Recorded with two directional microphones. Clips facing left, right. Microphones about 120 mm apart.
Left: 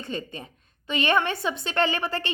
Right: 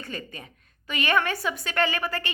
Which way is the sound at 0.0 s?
25° left (ahead or behind).